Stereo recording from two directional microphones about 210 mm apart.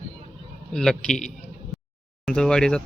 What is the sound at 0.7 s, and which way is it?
Speech, centre (ahead or behind).